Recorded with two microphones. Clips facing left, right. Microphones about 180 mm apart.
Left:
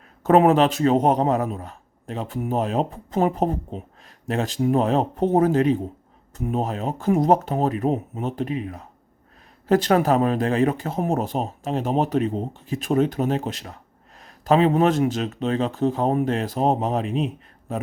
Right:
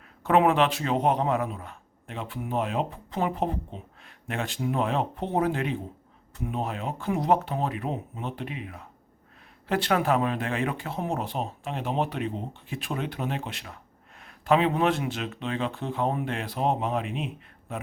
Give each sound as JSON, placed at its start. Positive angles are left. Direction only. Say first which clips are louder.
{"t": 0.2, "sound": "a man's voice", "louder": "left 5 dB", "side_deg": 40}